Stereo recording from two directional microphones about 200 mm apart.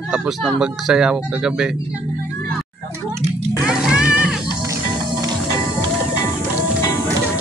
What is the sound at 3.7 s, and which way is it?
Music, 5° right (ahead or behind).